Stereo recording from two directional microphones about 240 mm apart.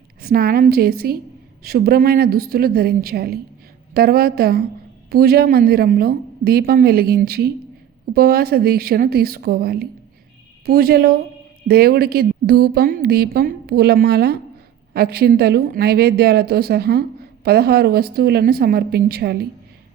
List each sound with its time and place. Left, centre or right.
0.2 s a woman's voice: right